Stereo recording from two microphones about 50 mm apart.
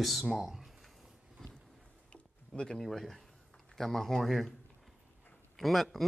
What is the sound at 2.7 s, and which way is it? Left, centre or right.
Speech, centre.